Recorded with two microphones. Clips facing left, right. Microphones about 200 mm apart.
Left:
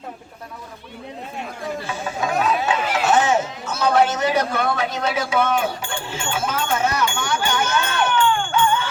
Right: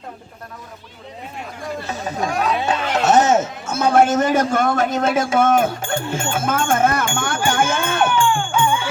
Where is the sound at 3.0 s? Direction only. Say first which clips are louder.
Right 4 dB; 40° right (ahead or behind).